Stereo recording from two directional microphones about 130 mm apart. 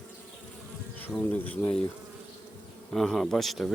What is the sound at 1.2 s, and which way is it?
Speech, 15° left (ahead or behind).